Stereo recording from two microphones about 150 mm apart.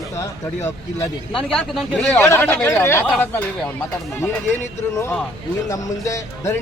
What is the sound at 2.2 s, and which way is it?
Speech, 15° left (ahead or behind).